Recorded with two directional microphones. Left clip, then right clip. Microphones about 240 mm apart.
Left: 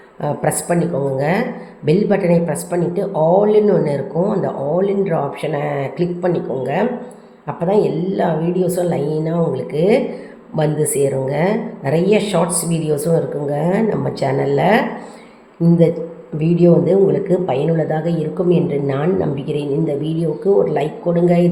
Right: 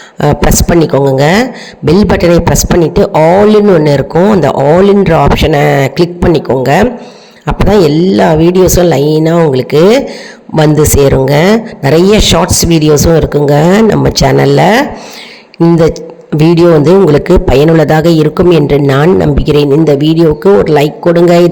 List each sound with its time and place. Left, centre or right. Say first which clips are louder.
0.2 s a man's voice: right 10 dB; right
16.4 s a man's voice: right 9 dB; right